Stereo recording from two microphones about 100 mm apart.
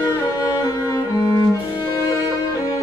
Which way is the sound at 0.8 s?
35° left (ahead or behind).